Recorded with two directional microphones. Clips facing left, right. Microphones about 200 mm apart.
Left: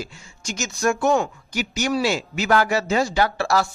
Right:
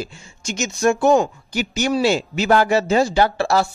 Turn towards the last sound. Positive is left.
turn(degrees=-30)  # may be behind; listen again after turning